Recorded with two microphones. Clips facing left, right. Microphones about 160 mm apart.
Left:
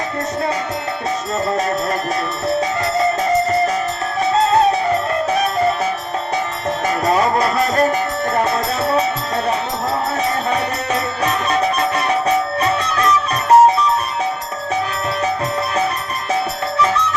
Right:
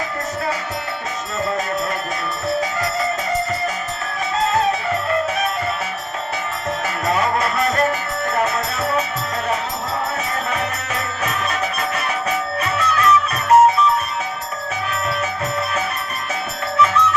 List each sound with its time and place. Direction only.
1.5 s music: 40° left (ahead or behind)
4.3 s music: 35° left (ahead or behind)
16.3 s music: 35° left (ahead or behind)